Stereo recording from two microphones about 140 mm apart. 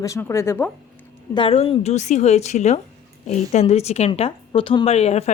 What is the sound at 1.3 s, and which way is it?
A woman's voice, 40° left (ahead or behind).